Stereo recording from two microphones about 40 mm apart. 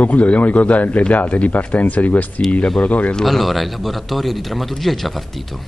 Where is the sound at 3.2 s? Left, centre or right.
Centre.